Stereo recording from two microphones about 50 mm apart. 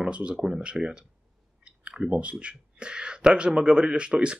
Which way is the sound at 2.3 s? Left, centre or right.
Centre.